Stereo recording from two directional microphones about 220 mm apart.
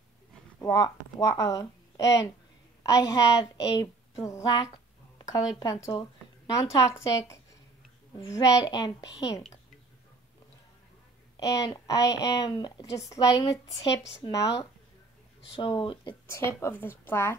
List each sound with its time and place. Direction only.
0.6 s a woman's voice: 15° left (ahead or behind)
11.6 s a woman's voice: 15° left (ahead or behind)
15.5 s speech: 20° left (ahead or behind)
16.4 s a woman's voice: 10° left (ahead or behind)